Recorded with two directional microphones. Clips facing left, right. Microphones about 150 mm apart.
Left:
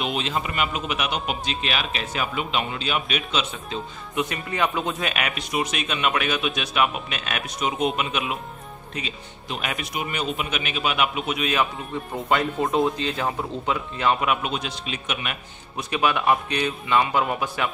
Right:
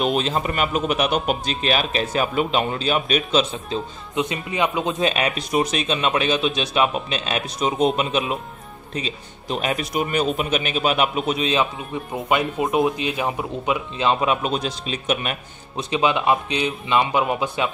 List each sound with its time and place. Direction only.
0.0 s a man's voice: 40° right (ahead or behind)
4.1 s a man's voice: 20° right (ahead or behind)
11.9 s speech: 15° right (ahead or behind); by 15.8 s 35° right (ahead or behind)
15.8 s speech: 20° right (ahead or behind)